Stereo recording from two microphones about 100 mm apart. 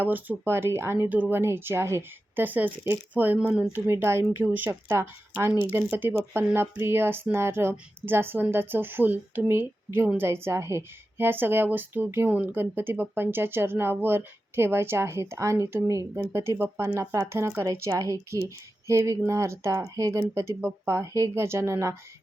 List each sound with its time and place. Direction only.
0.0 s speech: 20° right (ahead or behind)
3.8 s speech: 25° right (ahead or behind)